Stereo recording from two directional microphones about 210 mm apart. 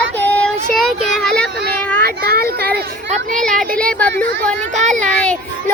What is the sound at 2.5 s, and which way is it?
Children playing, 50° right (ahead or behind).